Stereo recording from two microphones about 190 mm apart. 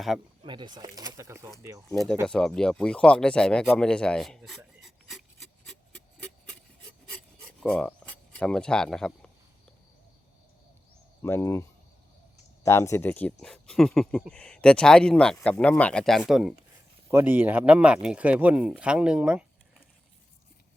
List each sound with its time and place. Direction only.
0.4 s speech: 25° right (ahead or behind)
2.2 s speech: 5° left (ahead or behind)
7.6 s speech: 5° left (ahead or behind)
11.2 s speech: 15° left (ahead or behind)
12.6 s speech: 15° left (ahead or behind); by 19.5 s 5° right (ahead or behind)